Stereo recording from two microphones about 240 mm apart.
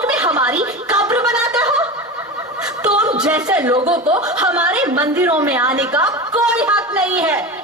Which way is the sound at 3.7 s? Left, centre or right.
Right.